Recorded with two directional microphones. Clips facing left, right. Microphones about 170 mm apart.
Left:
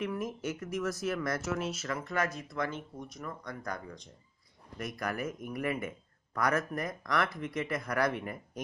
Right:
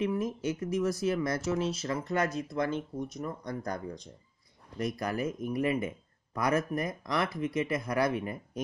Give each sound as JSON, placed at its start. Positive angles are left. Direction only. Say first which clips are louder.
{"t": 0.0, "sound": "speech", "louder": "right 4 dB", "side_deg": -30}